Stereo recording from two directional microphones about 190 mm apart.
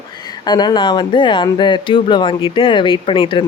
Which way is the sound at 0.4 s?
20° left (ahead or behind).